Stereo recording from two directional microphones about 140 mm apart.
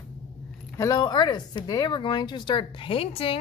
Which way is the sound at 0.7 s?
25° left (ahead or behind).